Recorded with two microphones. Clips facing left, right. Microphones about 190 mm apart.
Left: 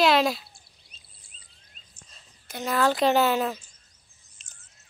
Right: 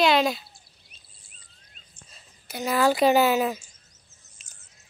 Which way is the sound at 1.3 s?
55° right (ahead or behind).